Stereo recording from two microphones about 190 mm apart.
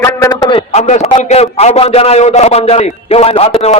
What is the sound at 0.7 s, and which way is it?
A man's voice, 35° left (ahead or behind).